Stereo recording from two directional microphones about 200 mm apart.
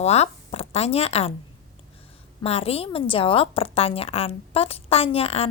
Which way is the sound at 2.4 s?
30° left (ahead or behind).